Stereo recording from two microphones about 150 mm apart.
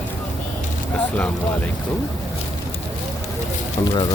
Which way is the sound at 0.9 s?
10° left (ahead or behind).